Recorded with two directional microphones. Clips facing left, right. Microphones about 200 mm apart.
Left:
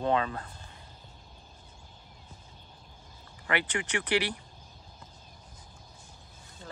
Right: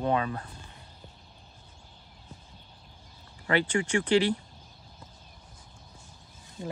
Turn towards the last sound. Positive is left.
turn(degrees=-15)  # may be behind; listen again after turning